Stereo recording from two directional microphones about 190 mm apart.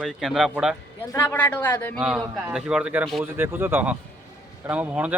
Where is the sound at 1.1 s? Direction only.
10° left (ahead or behind).